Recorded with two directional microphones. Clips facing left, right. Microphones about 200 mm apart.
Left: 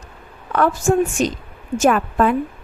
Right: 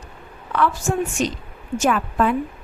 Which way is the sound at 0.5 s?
45° left (ahead or behind).